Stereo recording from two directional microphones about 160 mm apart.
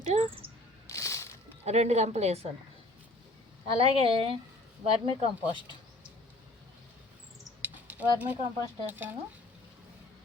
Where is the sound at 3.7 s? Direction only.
35° right (ahead or behind).